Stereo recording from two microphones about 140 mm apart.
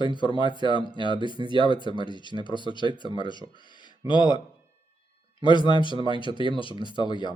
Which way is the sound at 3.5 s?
35° left (ahead or behind).